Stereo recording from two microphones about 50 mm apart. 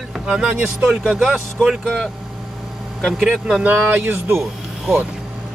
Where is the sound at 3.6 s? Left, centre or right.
Right.